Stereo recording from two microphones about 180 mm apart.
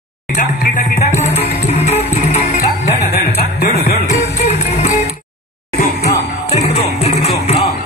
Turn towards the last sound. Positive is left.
turn(degrees=35)  # may be behind; listen again after turning